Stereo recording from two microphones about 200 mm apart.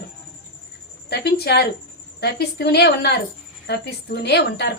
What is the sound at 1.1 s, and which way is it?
A woman's voice, 55° left (ahead or behind).